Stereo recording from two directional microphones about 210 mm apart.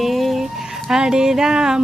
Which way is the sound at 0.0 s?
Centre (ahead or behind).